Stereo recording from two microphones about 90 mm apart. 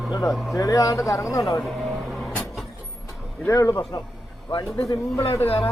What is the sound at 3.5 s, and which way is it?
Speech, 35° left (ahead or behind).